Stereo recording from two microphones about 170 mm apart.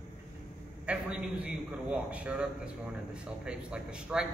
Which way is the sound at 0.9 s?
5° right (ahead or behind).